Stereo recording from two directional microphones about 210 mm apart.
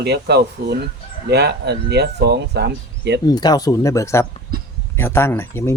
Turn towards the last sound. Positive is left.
turn(degrees=10)  # may be behind; listen again after turning